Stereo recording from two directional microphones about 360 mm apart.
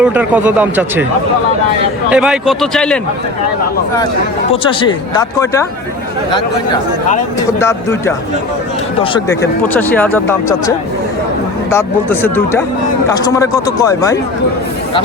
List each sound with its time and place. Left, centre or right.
0.0 s speech: centre
2.0 s speech: centre
4.5 s speech: centre
7.6 s speech: centre